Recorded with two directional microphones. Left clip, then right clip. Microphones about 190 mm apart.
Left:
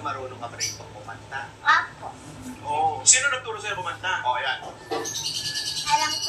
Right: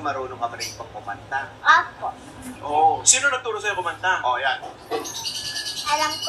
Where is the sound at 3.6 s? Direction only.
60° right (ahead or behind).